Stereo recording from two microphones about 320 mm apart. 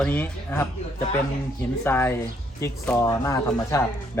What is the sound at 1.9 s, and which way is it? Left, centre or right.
Speech, centre.